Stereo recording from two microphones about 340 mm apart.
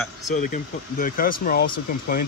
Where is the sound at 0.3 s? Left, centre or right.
Left.